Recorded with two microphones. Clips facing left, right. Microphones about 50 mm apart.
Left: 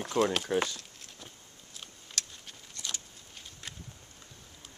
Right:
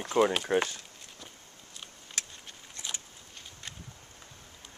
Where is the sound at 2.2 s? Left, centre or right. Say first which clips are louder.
Even; centre.